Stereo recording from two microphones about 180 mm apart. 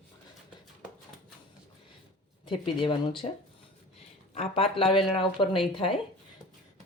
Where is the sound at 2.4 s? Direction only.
25° left (ahead or behind).